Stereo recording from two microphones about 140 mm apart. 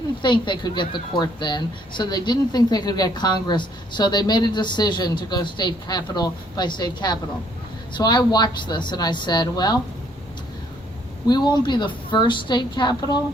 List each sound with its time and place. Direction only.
0.2 s a woman's voice: 35° left (ahead or behind)
11.3 s a woman's voice: 30° left (ahead or behind)